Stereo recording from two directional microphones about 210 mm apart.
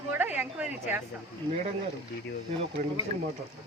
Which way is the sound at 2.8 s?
35° right (ahead or behind).